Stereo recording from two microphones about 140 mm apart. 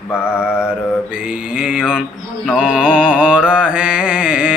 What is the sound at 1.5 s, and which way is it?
Mantra, 10° right (ahead or behind).